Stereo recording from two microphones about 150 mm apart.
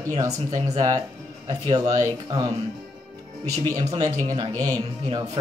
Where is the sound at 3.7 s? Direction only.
45° right (ahead or behind).